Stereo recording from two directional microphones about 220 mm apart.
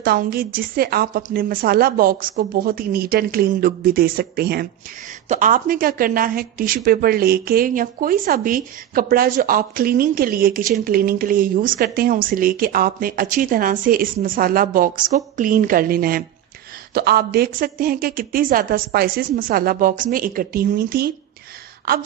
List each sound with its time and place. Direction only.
0.0 s a woman's voice: 45° right (ahead or behind)